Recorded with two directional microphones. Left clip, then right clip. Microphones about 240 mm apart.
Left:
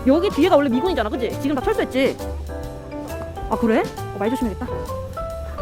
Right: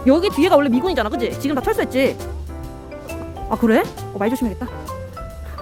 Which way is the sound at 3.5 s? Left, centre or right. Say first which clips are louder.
Right 2 dB; centre.